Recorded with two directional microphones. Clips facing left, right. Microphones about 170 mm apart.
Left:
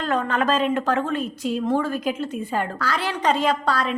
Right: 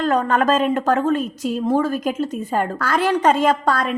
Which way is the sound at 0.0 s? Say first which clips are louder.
Right 5 dB; 45° right (ahead or behind).